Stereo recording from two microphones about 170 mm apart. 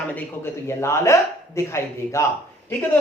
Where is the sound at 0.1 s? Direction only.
10° left (ahead or behind).